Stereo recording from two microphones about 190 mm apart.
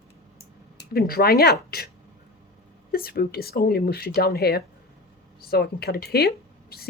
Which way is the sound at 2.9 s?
55° left (ahead or behind).